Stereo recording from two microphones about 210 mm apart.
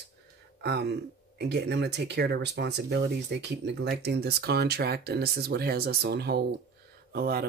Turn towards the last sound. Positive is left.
turn(degrees=-45)  # may be behind; listen again after turning